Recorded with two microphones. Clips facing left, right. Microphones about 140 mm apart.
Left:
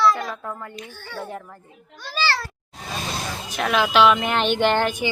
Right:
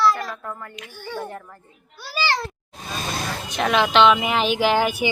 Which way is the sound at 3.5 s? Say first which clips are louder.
Right 1 dB; centre (ahead or behind).